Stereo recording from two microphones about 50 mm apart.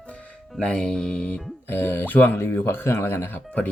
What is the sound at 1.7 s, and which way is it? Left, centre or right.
Speech, left.